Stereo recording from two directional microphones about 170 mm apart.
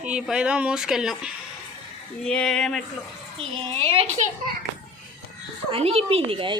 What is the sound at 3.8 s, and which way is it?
Speech, 40° right (ahead or behind).